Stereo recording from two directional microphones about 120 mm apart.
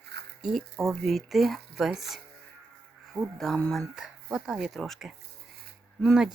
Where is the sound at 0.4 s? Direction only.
Centre (ahead or behind).